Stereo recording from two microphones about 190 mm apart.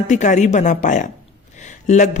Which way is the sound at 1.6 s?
40° left (ahead or behind).